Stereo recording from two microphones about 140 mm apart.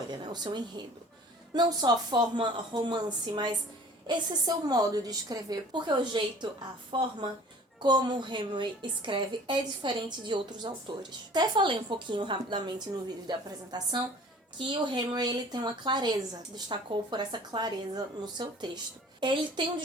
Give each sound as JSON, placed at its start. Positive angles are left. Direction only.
{"t": 0.2, "sound": "a woman's voice", "side_deg": -30}